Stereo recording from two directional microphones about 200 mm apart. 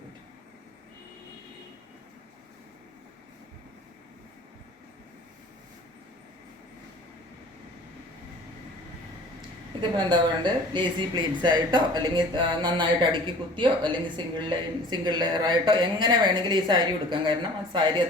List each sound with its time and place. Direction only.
10.0 s speech: 25° right (ahead or behind)